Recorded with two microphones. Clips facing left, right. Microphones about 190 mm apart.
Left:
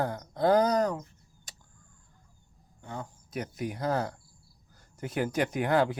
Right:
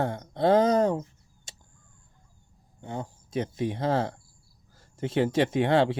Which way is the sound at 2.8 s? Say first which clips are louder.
Right 4 dB; 25° right (ahead or behind).